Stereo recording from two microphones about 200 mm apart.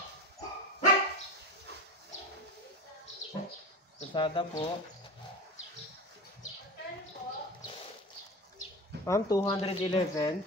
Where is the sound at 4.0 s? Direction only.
25° left (ahead or behind).